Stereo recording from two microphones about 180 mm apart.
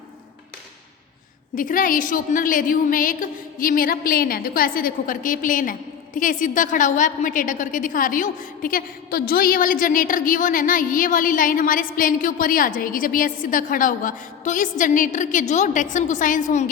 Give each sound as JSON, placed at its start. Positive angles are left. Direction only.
{"t": 1.5, "sound": "a woman's voice", "side_deg": 50}